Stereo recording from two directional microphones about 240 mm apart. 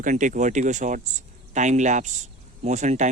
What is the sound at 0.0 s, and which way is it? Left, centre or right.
Speech, right.